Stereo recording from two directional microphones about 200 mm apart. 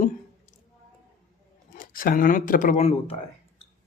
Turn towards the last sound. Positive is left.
turn(degrees=30)  # may be behind; listen again after turning